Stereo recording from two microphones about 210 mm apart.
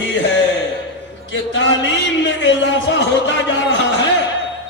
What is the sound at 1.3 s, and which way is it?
A man's voice, 60° left (ahead or behind).